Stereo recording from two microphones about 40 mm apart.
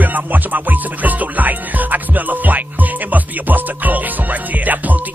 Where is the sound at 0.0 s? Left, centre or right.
Right.